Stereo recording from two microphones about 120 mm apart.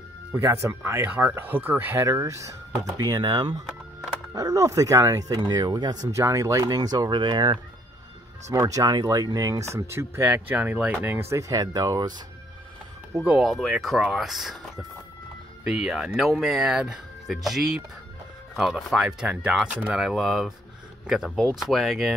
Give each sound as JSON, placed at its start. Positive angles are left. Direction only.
{"t": 0.3, "sound": "speech", "side_deg": -20}
{"t": 8.5, "sound": "speech", "side_deg": -25}
{"t": 13.2, "sound": "speech", "side_deg": -10}
{"t": 13.5, "sound": "speech", "side_deg": 0}